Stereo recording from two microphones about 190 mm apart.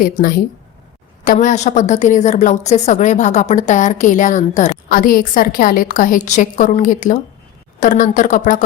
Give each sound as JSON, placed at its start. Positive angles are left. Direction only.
{"t": 0.0, "sound": "a woman's voice", "side_deg": 50}